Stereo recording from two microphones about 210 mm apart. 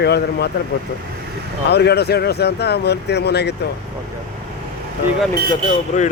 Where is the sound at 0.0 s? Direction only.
50° left (ahead or behind).